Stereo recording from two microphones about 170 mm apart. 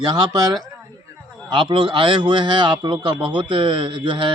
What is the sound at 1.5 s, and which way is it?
A man's voice, 30° right (ahead or behind).